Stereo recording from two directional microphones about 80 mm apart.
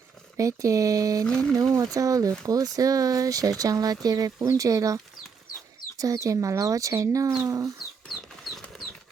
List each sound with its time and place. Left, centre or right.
0.3 s speech: right
1.2 s speech: centre
1.9 s speech: right
6.0 s speech: right
8.0 s chicken: centre